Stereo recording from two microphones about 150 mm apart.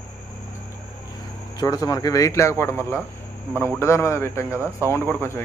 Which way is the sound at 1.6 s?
20° left (ahead or behind).